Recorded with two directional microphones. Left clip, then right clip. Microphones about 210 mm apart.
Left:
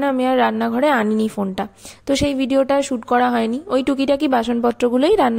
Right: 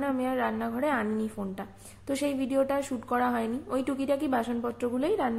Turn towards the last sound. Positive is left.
turn(degrees=50)  # may be behind; listen again after turning